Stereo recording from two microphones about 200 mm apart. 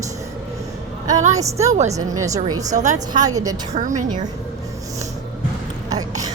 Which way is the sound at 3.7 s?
40° right (ahead or behind).